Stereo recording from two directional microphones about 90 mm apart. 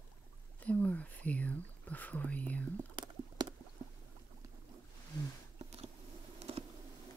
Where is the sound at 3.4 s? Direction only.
50° right (ahead or behind).